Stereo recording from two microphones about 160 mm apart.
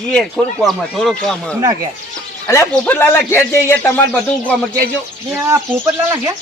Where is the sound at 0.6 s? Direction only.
Centre (ahead or behind).